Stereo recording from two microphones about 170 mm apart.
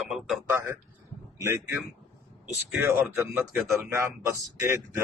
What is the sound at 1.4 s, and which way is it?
A man's voice, 15° right (ahead or behind).